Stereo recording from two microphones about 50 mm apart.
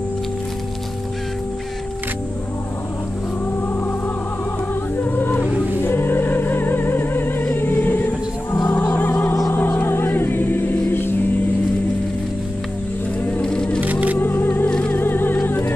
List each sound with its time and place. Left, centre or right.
4.9 s music: left
8.0 s music: left
8.7 s music: left
9.8 s choir: left
10.9 s a sound: left
13.4 s music: centre
14.2 s music: left